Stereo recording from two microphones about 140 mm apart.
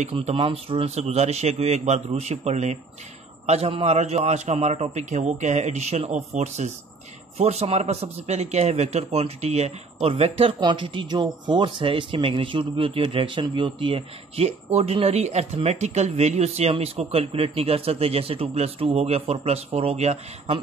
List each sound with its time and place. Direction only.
0.1 s speech: 40° right (ahead or behind)